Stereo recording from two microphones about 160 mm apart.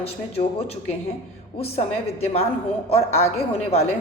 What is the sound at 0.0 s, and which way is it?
A woman's voice, 40° left (ahead or behind).